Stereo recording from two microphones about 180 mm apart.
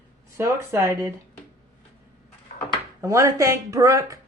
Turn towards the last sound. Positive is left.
turn(degrees=-15)  # may be behind; listen again after turning